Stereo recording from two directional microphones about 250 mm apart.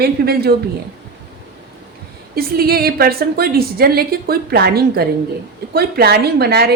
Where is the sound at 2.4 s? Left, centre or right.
Right.